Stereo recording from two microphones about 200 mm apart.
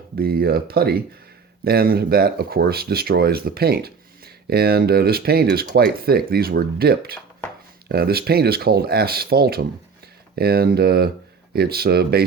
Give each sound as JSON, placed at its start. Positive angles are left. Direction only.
{"t": 0.2, "sound": "speech", "side_deg": -50}